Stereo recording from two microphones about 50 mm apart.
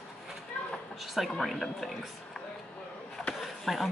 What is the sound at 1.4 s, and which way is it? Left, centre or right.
Speech, centre.